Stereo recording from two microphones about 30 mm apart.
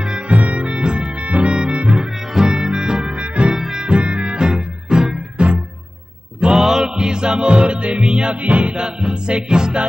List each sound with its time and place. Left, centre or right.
0.3 s music: right
1.2 s music: right
2.5 s music: right
3.1 s music: right
3.5 s music: centre
3.8 s music: right
4.4 s music: right
6.6 s music: centre
7.0 s music: right
8.4 s music: right
8.7 s music: right